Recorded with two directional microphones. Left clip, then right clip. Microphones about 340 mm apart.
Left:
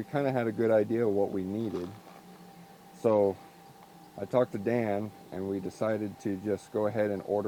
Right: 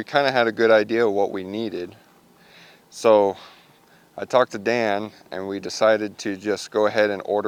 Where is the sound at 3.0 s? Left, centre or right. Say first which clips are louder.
Right 9 dB; centre.